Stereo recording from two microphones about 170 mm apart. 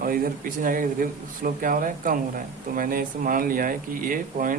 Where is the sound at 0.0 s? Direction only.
60° right (ahead or behind).